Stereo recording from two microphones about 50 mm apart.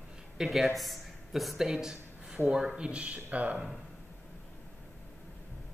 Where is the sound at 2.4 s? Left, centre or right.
Centre.